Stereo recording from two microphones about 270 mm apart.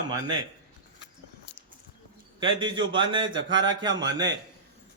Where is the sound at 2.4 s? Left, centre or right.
Centre.